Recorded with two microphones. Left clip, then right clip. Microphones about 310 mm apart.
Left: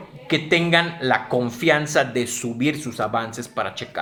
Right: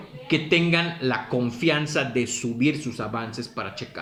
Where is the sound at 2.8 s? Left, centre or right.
Left.